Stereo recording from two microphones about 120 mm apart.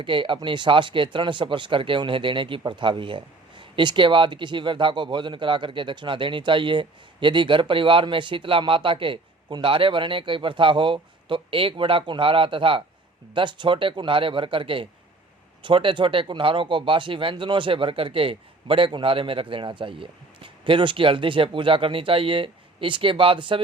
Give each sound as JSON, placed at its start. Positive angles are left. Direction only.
{"t": 0.0, "sound": "speech", "side_deg": -45}